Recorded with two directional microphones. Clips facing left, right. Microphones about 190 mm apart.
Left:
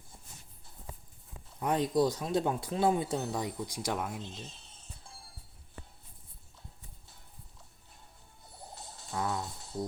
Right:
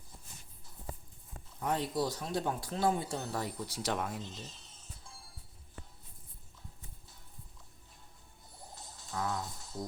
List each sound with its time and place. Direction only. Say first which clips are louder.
1.6 s speech: left 5 dB; 15° left (ahead or behind)
8.7 s music: left 3 dB; 30° left (ahead or behind)